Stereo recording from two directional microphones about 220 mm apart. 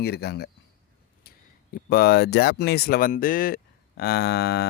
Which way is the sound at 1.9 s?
45° left (ahead or behind).